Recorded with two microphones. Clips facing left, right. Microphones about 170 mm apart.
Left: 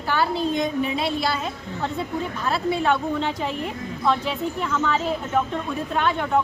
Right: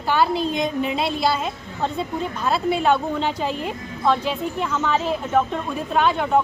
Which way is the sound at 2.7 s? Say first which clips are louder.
Right 2 dB; 20° right (ahead or behind).